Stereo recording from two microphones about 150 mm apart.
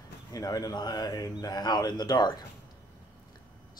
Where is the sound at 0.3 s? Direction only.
25° left (ahead or behind).